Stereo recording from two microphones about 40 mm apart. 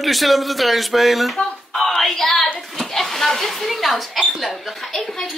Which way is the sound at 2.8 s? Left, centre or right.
Centre.